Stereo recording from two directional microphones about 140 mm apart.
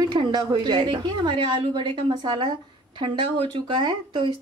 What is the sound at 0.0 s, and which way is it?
A woman's voice, 30° right (ahead or behind).